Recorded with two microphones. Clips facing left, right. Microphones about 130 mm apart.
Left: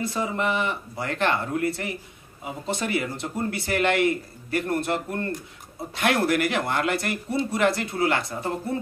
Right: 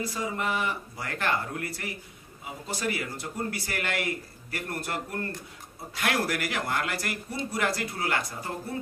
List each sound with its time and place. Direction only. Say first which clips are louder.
0.0 s a man's voice: left 5 dB; 25° left (ahead or behind)